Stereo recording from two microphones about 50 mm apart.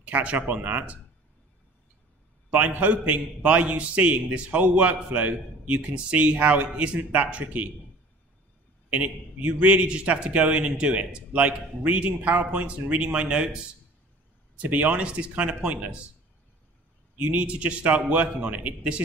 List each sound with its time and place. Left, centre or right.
0.0 s speech: right
2.5 s a man's voice: right
8.9 s a man's voice: right
14.6 s a man's voice: right
17.2 s a man's voice: right